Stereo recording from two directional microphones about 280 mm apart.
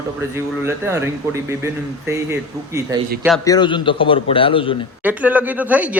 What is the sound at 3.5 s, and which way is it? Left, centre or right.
A man's voice, centre.